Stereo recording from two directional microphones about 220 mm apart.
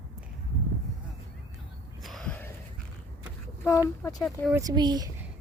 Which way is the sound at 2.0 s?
Centre (ahead or behind).